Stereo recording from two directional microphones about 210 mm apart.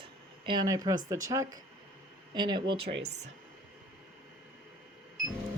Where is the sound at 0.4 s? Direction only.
20° right (ahead or behind).